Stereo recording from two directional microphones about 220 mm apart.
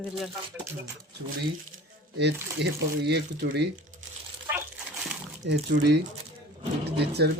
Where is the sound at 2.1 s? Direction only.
50° right (ahead or behind).